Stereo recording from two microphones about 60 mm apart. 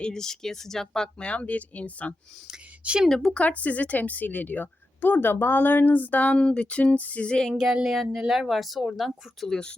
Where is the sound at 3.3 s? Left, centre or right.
Left.